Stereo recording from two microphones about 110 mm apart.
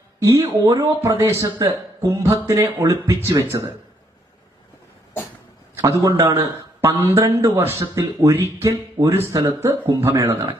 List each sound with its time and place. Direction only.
0.2 s a man's voice: 25° right (ahead or behind)
5.8 s a man's voice: 30° right (ahead or behind)